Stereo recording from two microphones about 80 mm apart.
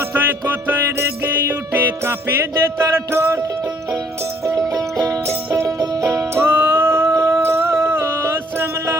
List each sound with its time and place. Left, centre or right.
0.1 s music: right
4.4 s music: right
5.3 s music: right
5.6 s music: right
6.4 s a sound: right